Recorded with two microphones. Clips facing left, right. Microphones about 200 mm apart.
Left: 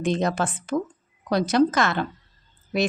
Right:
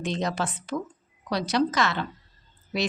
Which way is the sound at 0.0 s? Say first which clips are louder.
Left 5 dB; 50° left (ahead or behind).